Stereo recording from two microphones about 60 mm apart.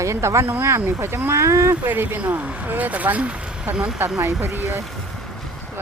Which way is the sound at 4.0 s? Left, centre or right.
Right.